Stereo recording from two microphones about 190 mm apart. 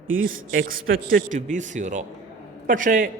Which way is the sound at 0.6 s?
50° right (ahead or behind).